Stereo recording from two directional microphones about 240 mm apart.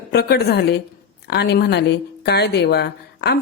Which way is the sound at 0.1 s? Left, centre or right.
Left.